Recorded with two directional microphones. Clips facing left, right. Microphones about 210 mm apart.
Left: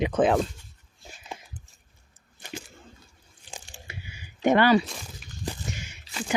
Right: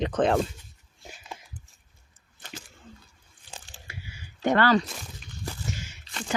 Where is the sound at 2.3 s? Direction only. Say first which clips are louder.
Left 5 dB; 10° left (ahead or behind).